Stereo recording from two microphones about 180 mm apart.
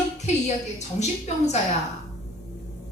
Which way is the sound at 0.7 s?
40° left (ahead or behind).